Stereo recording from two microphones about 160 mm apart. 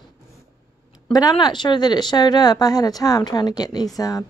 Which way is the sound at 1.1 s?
25° left (ahead or behind).